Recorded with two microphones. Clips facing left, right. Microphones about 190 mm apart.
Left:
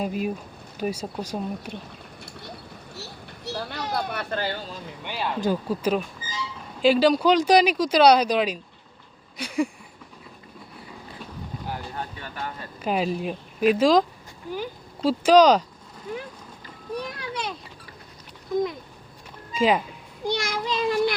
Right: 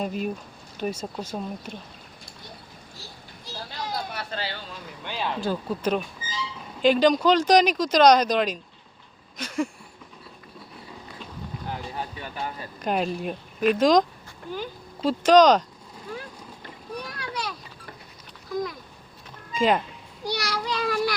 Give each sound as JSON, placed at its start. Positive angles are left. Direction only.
{"t": 0.0, "sound": "speech", "side_deg": 5}
{"t": 2.9, "sound": "a sound", "side_deg": 70}
{"t": 5.0, "sound": "speech", "side_deg": 10}
{"t": 11.2, "sound": "boat", "side_deg": 10}
{"t": 11.9, "sound": "speech", "side_deg": -10}
{"t": 12.8, "sound": "speech", "side_deg": 5}
{"t": 17.2, "sound": "a sound", "side_deg": 25}
{"t": 18.5, "sound": "a sound", "side_deg": 25}
{"t": 19.5, "sound": "speech", "side_deg": 5}
{"t": 20.2, "sound": "a child's voice", "side_deg": 25}